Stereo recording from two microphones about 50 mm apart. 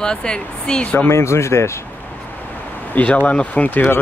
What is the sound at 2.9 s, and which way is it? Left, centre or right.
Speech, left.